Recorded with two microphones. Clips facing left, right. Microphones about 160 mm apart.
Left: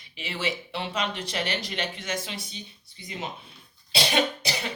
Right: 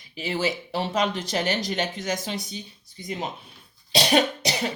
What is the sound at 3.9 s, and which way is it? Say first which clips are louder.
Cough: right 4 dB; 40° right (ahead or behind).